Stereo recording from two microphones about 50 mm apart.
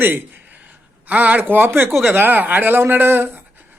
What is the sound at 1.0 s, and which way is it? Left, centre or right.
Speech, right.